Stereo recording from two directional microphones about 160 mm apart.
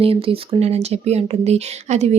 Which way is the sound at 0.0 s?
35° right (ahead or behind).